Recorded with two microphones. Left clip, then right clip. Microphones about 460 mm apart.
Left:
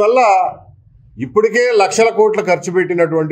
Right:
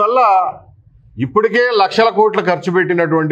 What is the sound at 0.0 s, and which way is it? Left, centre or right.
A man's voice, right.